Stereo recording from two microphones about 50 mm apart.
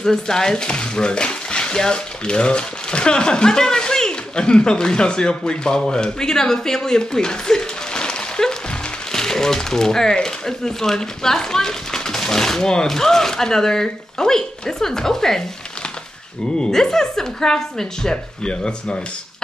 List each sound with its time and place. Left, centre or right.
0.0 s speech: centre
16.5 s speech: centre